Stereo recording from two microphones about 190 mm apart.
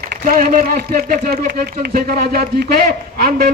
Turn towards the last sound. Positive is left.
turn(degrees=-50)  # may be behind; listen again after turning